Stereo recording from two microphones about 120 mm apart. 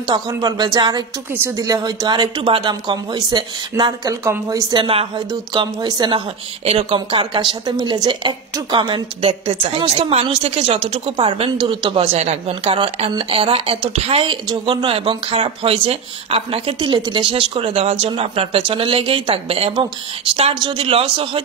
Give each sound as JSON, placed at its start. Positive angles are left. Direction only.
{"t": 0.0, "sound": "speech", "side_deg": -35}
{"t": 6.6, "sound": "speech", "side_deg": -50}
{"t": 12.1, "sound": "speech", "side_deg": -65}